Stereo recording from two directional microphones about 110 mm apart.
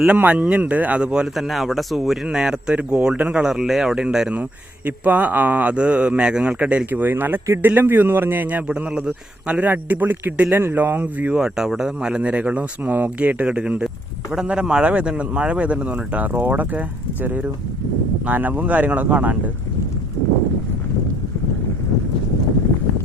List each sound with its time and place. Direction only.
0.2 s a man's voice: 15° right (ahead or behind)